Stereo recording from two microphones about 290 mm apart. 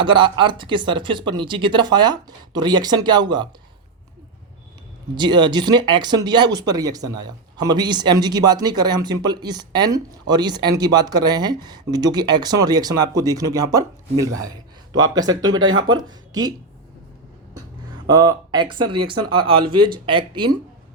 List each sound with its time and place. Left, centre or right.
0.0 s speech: centre
5.1 s speech: centre
18.1 s speech: centre